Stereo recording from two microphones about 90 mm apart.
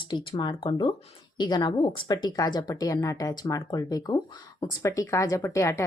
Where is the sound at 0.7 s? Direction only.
65° left (ahead or behind).